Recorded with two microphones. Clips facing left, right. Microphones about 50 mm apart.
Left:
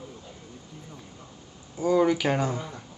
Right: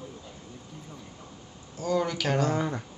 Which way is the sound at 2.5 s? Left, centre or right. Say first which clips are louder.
Right 7 dB; right.